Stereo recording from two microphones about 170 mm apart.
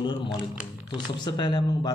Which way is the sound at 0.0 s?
25° left (ahead or behind).